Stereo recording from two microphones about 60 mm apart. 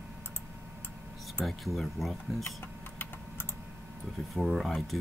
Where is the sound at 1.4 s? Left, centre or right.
Centre.